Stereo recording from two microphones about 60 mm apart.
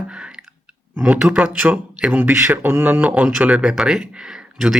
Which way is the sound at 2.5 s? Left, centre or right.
Right.